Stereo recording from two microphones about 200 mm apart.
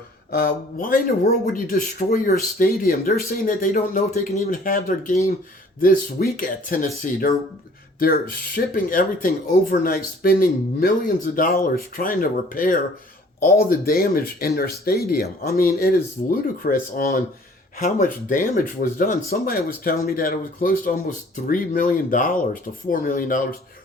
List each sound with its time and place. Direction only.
0.3 s speech: 50° left (ahead or behind)
8.5 s speech: 45° left (ahead or behind)